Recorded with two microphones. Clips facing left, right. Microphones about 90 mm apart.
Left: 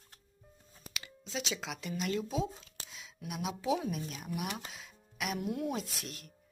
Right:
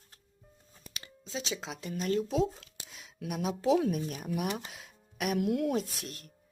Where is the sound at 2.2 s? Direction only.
65° right (ahead or behind).